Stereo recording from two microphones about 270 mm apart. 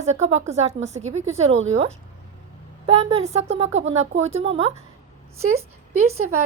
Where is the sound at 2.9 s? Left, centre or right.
Right.